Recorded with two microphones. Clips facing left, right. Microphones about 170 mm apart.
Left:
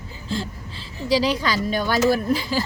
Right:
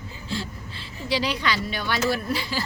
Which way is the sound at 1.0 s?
40° left (ahead or behind).